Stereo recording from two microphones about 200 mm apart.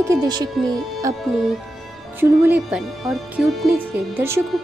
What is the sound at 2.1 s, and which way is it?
Speech, 10° right (ahead or behind).